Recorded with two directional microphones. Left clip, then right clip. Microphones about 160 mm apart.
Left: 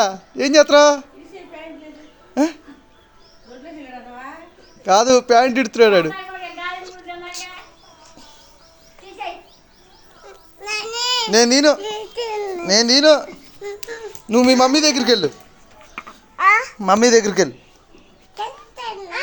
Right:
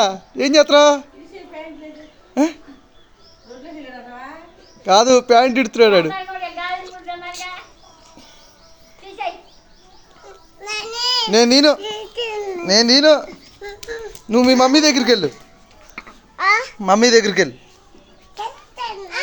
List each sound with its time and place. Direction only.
0.0 s speech: 5° right (ahead or behind)
2.3 s speech: 5° right (ahead or behind)
4.8 s speech: 5° right (ahead or behind)
10.2 s babbling: centre (ahead or behind)
11.3 s speech: 10° right (ahead or behind)
11.8 s babbling: 5° left (ahead or behind); by 16.6 s 15° right (ahead or behind)
16.8 s speech: centre (ahead or behind)